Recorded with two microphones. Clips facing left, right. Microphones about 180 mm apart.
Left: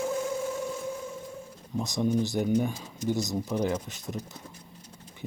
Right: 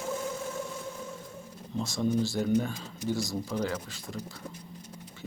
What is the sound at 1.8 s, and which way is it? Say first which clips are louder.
Speech: left 1 dB; 15° left (ahead or behind).